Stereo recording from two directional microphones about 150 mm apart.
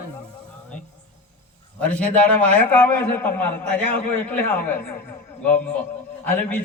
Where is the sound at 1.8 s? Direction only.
10° left (ahead or behind).